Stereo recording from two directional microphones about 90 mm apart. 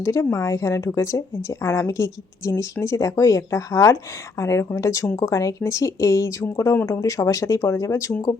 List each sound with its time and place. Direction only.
0.0 s speech: 35° left (ahead or behind)